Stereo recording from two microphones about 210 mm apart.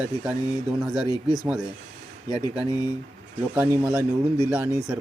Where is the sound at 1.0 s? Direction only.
20° left (ahead or behind).